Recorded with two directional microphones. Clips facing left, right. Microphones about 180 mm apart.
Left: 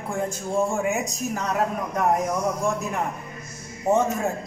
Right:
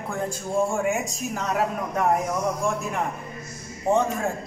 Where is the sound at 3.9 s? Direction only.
5° left (ahead or behind).